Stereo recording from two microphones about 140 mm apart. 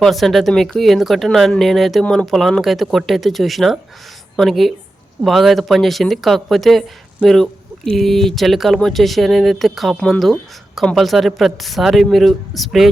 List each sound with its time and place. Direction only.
0.0 s speech: centre (ahead or behind)